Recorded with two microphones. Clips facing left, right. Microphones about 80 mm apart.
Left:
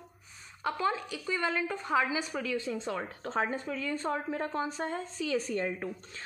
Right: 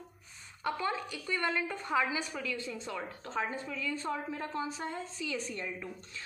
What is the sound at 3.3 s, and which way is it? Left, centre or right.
A woman's voice, left.